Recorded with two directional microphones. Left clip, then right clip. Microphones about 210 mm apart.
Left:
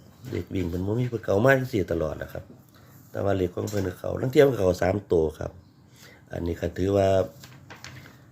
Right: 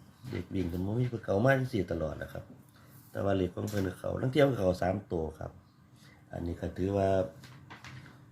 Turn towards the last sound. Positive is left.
turn(degrees=30)  # may be behind; listen again after turning